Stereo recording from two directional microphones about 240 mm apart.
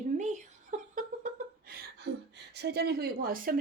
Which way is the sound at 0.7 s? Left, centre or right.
Right.